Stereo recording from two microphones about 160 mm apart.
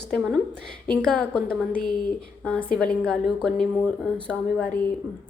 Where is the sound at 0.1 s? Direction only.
Centre (ahead or behind).